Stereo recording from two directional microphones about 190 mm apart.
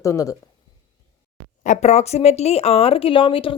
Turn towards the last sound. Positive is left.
turn(degrees=30)  # may be behind; listen again after turning